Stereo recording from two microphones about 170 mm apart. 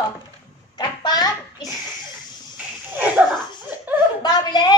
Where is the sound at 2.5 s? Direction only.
10° right (ahead or behind).